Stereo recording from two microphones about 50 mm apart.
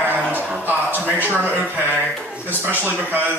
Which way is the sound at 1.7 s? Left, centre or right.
Right.